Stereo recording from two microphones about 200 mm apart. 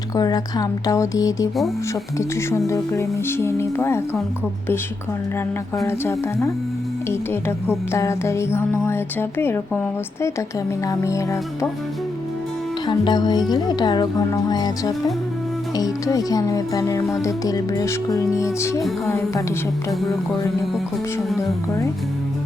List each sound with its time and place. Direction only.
0.2 s speech: 20° left (ahead or behind)
5.7 s speech: 15° left (ahead or behind)
10.8 s speech: 15° left (ahead or behind)
12.9 s speech: 20° left (ahead or behind)